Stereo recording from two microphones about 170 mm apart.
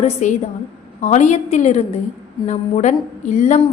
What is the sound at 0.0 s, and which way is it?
A woman's voice, 45° left (ahead or behind).